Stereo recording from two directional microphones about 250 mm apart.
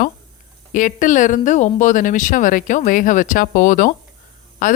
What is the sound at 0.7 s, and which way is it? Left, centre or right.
Speech, left.